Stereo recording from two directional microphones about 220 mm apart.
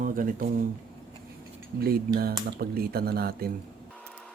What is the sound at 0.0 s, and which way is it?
Speech, 40° right (ahead or behind).